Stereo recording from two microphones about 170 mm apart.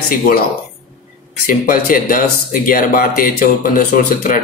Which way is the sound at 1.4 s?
55° left (ahead or behind).